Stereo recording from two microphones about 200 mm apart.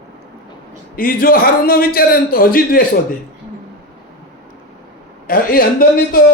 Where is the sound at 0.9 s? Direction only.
45° left (ahead or behind).